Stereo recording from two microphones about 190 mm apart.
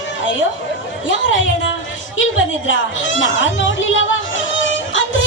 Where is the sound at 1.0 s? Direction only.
75° left (ahead or behind).